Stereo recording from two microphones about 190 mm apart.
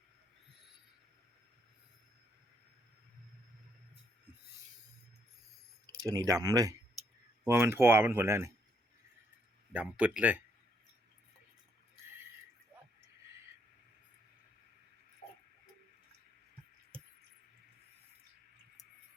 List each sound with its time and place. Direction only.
6.0 s speech: 20° right (ahead or behind)
9.7 s speech: 5° right (ahead or behind)
15.2 s a sound: 40° left (ahead or behind)